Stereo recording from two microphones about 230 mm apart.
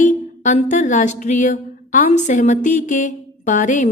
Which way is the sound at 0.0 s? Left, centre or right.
Left.